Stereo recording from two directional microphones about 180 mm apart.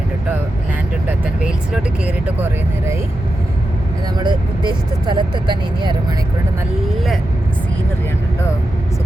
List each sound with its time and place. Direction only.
1.2 s speech: 5° right (ahead or behind)
4.2 s speech: 25° right (ahead or behind)